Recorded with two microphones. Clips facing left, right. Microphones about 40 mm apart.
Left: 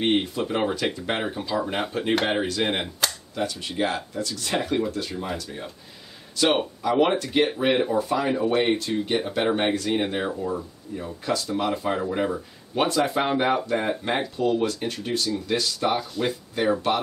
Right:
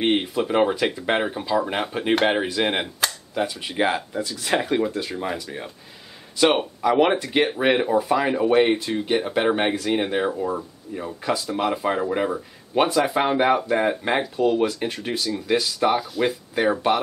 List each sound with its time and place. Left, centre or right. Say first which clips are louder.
0.0 s speech: right 2 dB; centre
10.4 s speech: right 2 dB; right
11.2 s speech: right 2 dB; centre